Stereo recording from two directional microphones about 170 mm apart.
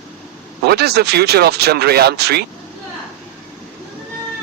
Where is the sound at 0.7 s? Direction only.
70° right (ahead or behind).